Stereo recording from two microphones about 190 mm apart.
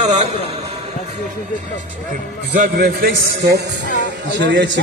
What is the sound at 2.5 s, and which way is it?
A man's voice, 50° right (ahead or behind).